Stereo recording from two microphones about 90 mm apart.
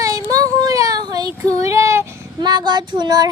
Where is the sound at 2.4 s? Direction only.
55° right (ahead or behind).